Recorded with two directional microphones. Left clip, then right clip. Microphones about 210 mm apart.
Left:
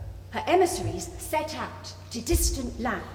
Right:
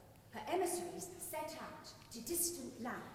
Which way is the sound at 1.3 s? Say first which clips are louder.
Left 16 dB; 45° left (ahead or behind).